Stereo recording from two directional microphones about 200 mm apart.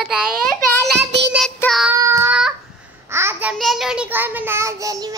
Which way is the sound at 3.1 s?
10° right (ahead or behind).